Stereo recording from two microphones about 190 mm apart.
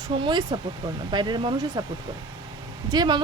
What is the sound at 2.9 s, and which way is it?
Speech, 20° right (ahead or behind).